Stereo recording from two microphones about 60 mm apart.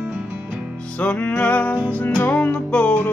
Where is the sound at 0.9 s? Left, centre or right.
Left.